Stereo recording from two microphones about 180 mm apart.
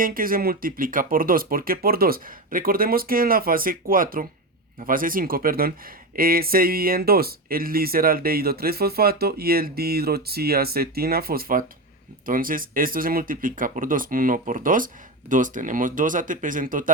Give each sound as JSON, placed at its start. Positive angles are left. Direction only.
{"t": 0.0, "sound": "speech", "side_deg": -50}